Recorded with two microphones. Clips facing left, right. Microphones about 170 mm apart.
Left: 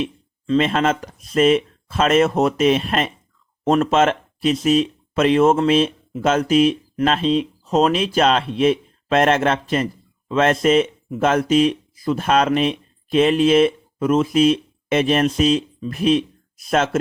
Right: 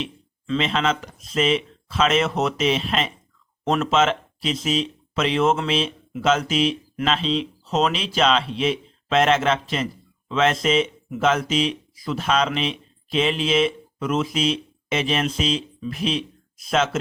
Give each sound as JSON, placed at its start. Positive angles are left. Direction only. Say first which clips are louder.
{"t": 0.0, "sound": "speech", "louder": "left 6 dB", "side_deg": 45}